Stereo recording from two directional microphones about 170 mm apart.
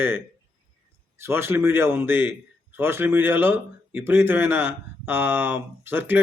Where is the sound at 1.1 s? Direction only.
15° right (ahead or behind).